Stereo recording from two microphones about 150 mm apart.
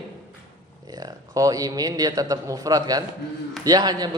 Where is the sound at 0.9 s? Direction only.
25° right (ahead or behind).